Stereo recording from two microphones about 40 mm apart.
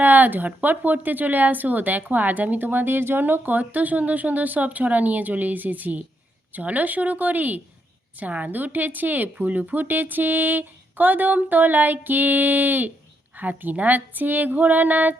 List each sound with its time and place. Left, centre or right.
0.0 s a woman's voice: right